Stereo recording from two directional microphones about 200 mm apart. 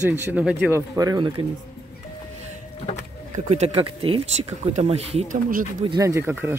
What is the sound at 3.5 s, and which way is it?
Speech, 30° right (ahead or behind).